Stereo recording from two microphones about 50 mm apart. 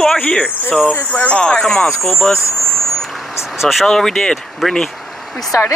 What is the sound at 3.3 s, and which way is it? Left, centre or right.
Speech, centre.